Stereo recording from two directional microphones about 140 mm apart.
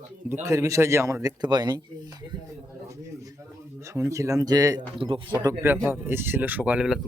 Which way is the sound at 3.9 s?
20° right (ahead or behind).